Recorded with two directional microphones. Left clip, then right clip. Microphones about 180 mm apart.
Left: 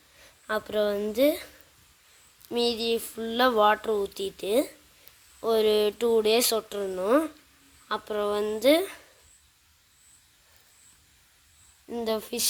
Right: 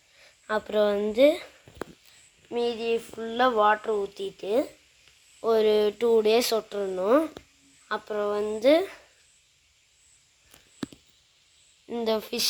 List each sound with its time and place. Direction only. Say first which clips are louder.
0.2 s speech: right 1 dB; 5° left (ahead or behind)
2.5 s speech: even; 25° left (ahead or behind)
5.4 s speech: right 1 dB; 10° left (ahead or behind)
11.9 s speech: right 2 dB; 5° left (ahead or behind)